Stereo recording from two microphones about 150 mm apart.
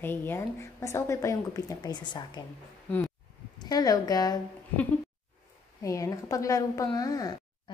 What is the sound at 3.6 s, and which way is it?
Speech, 25° left (ahead or behind).